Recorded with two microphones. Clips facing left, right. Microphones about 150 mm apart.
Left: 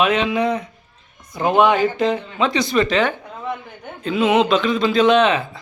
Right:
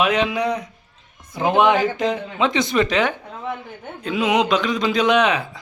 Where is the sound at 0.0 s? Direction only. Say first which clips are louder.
Left 1 dB; 10° right (ahead or behind).